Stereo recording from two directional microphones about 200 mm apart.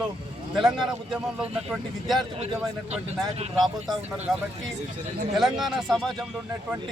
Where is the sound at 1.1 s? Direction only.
5° right (ahead or behind).